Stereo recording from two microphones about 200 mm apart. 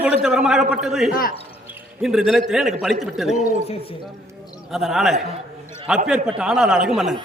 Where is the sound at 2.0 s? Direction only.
Centre (ahead or behind).